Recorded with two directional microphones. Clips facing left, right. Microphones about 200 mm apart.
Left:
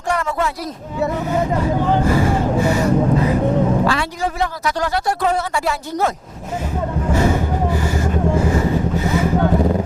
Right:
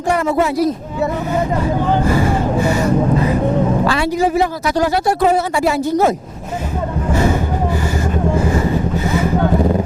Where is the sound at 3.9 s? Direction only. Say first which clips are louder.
Right 5 dB; 5° right (ahead or behind).